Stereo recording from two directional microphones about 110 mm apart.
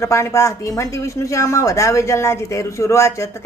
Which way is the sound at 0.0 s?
25° left (ahead or behind).